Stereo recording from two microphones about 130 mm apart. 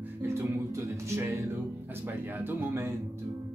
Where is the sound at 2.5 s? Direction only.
20° right (ahead or behind).